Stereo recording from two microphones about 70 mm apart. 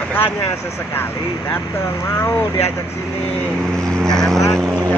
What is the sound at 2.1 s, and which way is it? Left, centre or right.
Speech, left.